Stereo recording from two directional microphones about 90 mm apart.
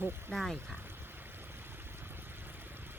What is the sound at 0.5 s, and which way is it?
Speech, 25° right (ahead or behind).